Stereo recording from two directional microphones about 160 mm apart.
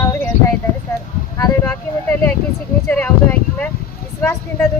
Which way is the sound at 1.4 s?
15° left (ahead or behind).